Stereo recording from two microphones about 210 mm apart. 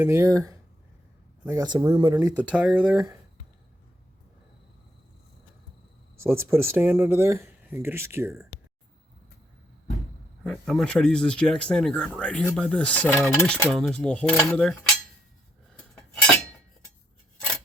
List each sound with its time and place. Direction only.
0.0 s speech: 15° right (ahead or behind)
6.1 s speech: 10° right (ahead or behind)
10.4 s speech: centre (ahead or behind)
15.7 s cutlery: 5° left (ahead or behind)